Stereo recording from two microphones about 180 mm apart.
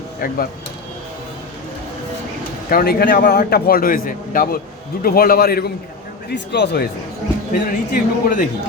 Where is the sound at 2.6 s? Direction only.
55° left (ahead or behind).